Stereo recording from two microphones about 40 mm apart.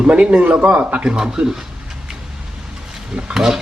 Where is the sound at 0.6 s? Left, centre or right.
Right.